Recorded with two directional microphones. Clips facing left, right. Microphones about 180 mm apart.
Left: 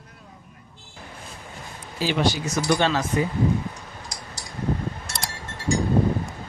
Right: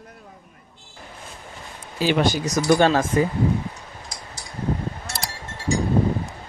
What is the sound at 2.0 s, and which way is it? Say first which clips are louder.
Speech: right 3 dB; 50° right (ahead or behind).